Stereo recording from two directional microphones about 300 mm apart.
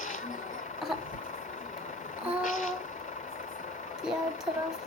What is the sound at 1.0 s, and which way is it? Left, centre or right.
Vehicle, left.